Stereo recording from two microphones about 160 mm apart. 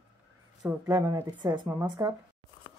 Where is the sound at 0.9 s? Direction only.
20° right (ahead or behind).